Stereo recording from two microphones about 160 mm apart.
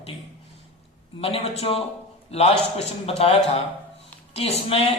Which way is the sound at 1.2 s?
40° left (ahead or behind).